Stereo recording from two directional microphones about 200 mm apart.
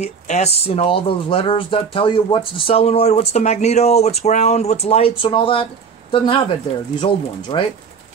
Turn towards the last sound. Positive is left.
turn(degrees=25)  # may be behind; listen again after turning